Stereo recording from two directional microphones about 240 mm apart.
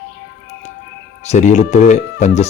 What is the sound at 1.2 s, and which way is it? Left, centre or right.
Speech, left.